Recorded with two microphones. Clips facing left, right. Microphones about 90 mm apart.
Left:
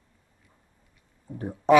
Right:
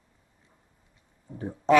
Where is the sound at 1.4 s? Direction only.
15° left (ahead or behind).